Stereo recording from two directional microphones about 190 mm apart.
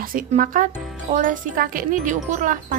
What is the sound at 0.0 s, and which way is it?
Speech, 45° right (ahead or behind).